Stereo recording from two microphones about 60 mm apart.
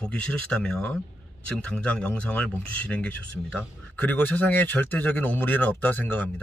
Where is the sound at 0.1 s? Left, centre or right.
Centre.